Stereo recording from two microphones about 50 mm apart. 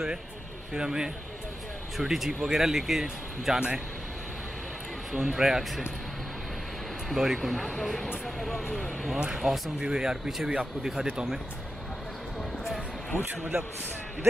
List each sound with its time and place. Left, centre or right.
0.7 s speech: centre
3.5 s speech: centre
5.1 s speech: centre
7.1 s speech: centre
9.1 s speech: centre
13.2 s speech: right